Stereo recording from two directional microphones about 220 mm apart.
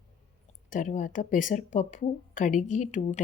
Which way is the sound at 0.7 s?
35° left (ahead or behind).